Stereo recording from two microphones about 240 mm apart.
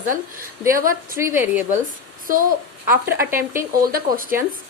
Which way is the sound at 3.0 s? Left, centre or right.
Centre.